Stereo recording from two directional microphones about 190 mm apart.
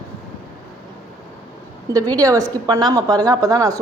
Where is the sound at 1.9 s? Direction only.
20° right (ahead or behind).